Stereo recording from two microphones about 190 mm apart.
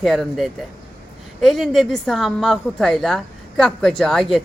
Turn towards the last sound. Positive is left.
turn(degrees=0)  # may be behind; listen again after turning